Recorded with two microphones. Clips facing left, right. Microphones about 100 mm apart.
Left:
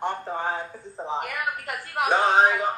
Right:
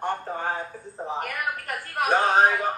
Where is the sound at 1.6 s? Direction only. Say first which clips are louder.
Even; 20° left (ahead or behind).